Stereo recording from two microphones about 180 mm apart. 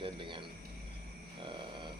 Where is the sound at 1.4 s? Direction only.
25° right (ahead or behind).